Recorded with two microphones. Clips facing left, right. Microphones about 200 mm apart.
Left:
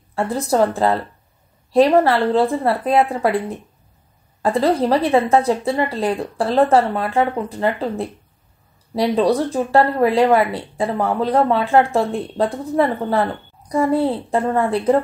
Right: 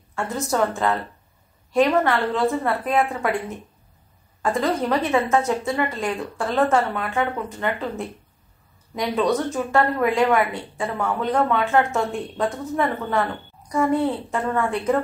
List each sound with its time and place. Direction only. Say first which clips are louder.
0.1 s speech: left 5 dB; 35° left (ahead or behind)